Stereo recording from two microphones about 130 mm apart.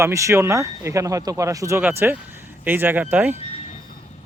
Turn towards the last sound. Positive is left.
turn(degrees=-15)  # may be behind; listen again after turning